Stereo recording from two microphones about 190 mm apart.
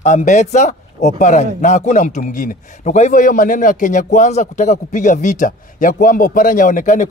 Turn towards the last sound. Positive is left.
turn(degrees=45)  # may be behind; listen again after turning